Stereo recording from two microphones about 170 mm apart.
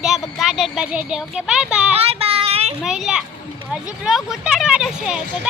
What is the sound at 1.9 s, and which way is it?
Child singing, 35° right (ahead or behind).